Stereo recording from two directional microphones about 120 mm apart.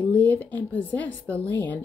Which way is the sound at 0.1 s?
15° left (ahead or behind).